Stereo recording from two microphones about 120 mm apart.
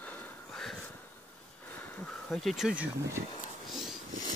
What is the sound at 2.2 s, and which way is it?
Speech, 5° left (ahead or behind).